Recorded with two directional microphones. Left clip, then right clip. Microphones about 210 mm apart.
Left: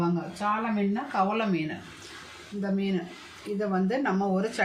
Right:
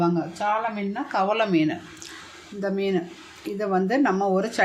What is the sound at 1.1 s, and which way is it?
Speech, 55° right (ahead or behind).